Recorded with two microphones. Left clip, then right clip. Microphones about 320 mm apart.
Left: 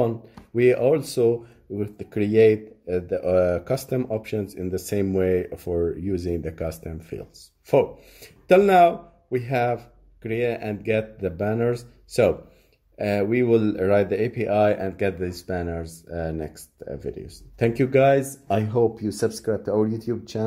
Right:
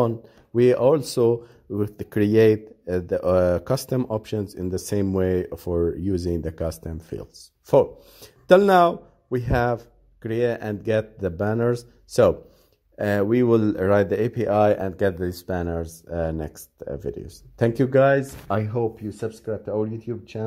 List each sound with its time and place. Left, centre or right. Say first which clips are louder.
0.0 s speech: right 1 dB; right
8.5 s a man's voice: even; right; by 20.4 s centre